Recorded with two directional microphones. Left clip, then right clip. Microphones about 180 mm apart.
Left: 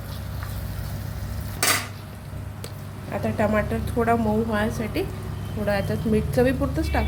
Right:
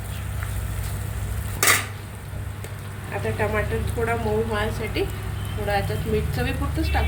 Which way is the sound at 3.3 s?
50° left (ahead or behind).